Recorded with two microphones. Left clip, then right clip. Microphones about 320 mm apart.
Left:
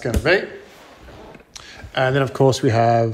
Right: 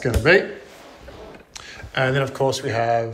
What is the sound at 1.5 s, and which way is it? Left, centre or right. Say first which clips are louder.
Speech: right 1 dB; centre.